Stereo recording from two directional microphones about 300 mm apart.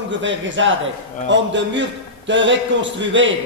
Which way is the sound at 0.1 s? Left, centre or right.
Right.